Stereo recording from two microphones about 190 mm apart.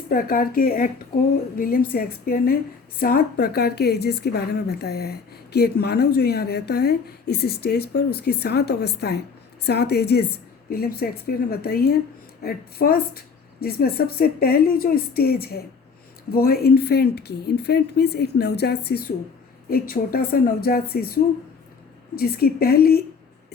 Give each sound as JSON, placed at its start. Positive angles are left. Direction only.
{"t": 0.1, "sound": "a woman's voice", "side_deg": 50}
{"t": 22.1, "sound": "speech", "side_deg": 55}